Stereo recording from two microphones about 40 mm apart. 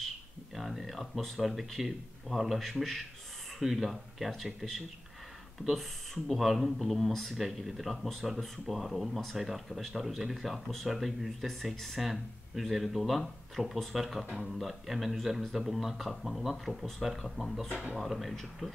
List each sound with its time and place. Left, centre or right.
0.6 s speech: centre
14.2 s speech: right
14.6 s speech: centre